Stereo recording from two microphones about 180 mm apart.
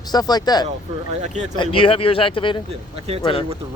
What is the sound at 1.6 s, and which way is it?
Speech, 30° left (ahead or behind).